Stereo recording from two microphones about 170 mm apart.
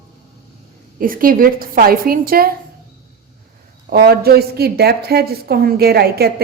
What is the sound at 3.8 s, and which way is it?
Speech, 65° right (ahead or behind).